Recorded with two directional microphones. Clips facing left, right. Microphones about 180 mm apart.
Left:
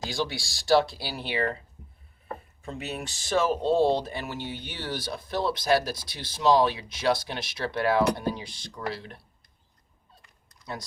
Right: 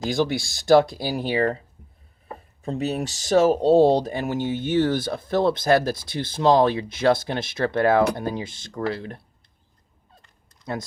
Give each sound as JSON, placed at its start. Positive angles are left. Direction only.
{"t": 0.1, "sound": "speech", "side_deg": -50}
{"t": 2.6, "sound": "speech", "side_deg": -35}